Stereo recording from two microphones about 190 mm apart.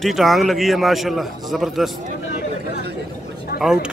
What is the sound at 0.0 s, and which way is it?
Speech, centre (ahead or behind).